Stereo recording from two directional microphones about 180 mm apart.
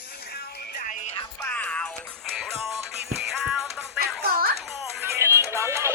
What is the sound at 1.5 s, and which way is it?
Music, 5° left (ahead or behind).